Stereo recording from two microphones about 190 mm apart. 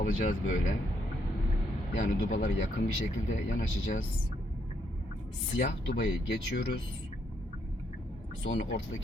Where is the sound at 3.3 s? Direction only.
40° left (ahead or behind).